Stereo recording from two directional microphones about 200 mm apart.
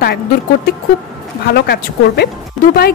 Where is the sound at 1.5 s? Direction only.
55° left (ahead or behind).